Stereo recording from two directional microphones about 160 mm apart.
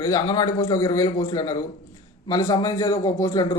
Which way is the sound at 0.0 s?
25° left (ahead or behind).